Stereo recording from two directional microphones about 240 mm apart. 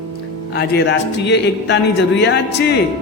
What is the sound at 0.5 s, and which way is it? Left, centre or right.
Speech, left.